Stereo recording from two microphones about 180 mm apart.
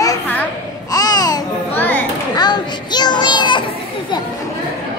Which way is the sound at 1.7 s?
10° left (ahead or behind).